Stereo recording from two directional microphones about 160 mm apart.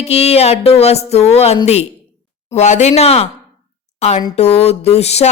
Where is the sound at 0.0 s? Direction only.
40° left (ahead or behind).